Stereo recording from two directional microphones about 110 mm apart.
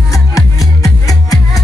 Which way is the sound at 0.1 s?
30° left (ahead or behind).